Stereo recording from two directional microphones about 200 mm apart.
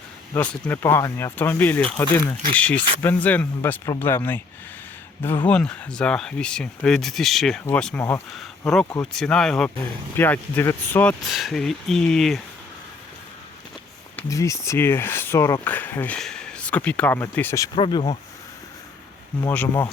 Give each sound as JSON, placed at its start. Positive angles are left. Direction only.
{"t": 0.3, "sound": "speech", "side_deg": 10}
{"t": 14.2, "sound": "speech", "side_deg": 15}
{"t": 17.7, "sound": "speech", "side_deg": 25}
{"t": 19.4, "sound": "speech", "side_deg": 10}